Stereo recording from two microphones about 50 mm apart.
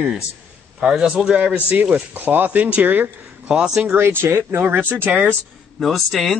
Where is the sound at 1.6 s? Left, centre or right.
Right.